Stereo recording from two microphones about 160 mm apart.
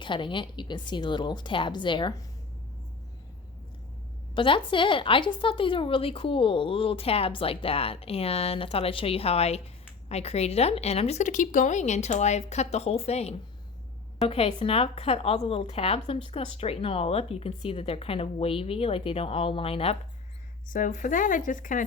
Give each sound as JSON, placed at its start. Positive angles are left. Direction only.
{"t": 0.0, "sound": "speech", "side_deg": 30}
{"t": 4.4, "sound": "a woman's voice", "side_deg": 30}
{"t": 20.7, "sound": "speech", "side_deg": 55}